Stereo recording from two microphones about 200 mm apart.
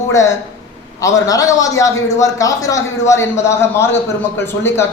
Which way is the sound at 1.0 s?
15° left (ahead or behind).